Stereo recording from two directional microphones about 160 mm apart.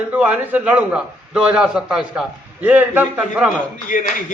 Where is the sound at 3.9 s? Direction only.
55° left (ahead or behind).